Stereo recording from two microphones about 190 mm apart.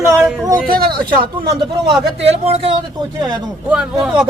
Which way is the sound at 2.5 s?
30° right (ahead or behind).